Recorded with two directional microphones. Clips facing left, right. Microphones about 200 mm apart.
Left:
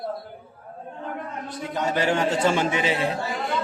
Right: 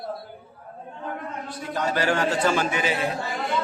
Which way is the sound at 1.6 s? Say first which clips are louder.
Left 1 dB; 20° left (ahead or behind).